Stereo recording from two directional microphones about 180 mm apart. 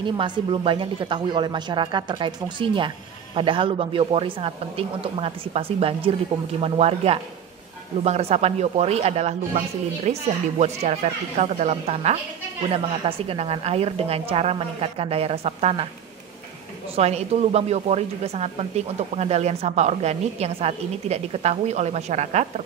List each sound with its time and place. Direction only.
0.0 s speech: 30° right (ahead or behind)
16.9 s speech: 35° right (ahead or behind)